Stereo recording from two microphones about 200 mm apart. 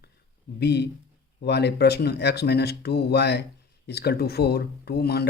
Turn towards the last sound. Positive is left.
turn(degrees=55)  # may be behind; listen again after turning